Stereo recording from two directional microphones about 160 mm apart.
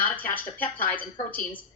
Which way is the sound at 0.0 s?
10° left (ahead or behind).